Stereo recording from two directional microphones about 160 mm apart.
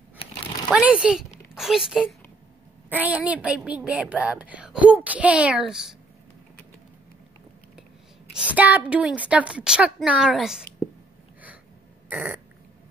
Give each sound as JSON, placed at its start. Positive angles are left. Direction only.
{"t": 0.7, "sound": "a woman's voice", "side_deg": -5}
{"t": 8.3, "sound": "a woman's voice", "side_deg": -5}
{"t": 12.1, "sound": "a sound", "side_deg": -10}